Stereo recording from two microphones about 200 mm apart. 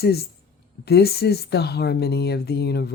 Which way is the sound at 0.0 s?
55° left (ahead or behind).